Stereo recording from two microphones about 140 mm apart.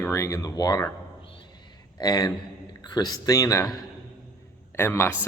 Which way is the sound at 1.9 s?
25° left (ahead or behind).